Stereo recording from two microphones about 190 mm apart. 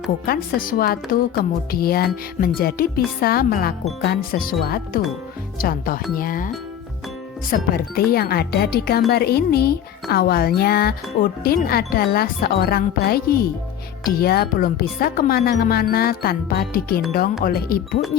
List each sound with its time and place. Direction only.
0.3 s speech: 50° left (ahead or behind)
7.5 s speech: 55° left (ahead or behind)